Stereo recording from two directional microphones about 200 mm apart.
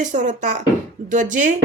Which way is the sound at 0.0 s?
40° right (ahead or behind).